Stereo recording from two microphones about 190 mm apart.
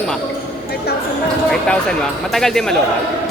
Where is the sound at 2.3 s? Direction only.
Centre (ahead or behind).